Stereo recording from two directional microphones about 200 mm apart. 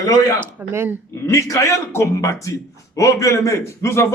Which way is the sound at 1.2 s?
15° left (ahead or behind).